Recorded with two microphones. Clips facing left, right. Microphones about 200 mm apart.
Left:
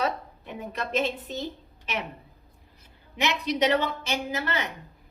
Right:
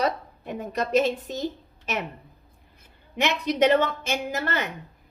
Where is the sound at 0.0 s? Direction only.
40° right (ahead or behind).